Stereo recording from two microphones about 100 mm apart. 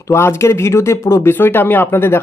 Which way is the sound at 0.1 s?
25° left (ahead or behind).